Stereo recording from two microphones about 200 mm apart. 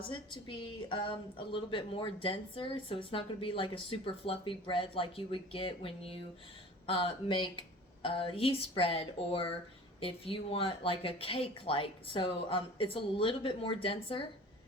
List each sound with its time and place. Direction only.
0.1 s a woman's voice: 25° left (ahead or behind)